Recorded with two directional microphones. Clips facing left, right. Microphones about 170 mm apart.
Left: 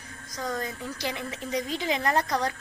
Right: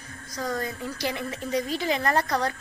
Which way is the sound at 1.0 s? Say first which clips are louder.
Right 3 dB; 15° left (ahead or behind).